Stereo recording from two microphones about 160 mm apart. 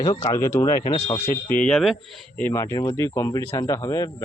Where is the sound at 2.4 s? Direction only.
15° left (ahead or behind).